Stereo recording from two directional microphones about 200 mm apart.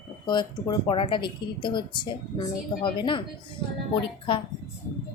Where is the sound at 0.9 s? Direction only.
25° left (ahead or behind).